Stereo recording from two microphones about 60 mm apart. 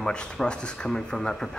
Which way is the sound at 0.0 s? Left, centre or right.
Centre.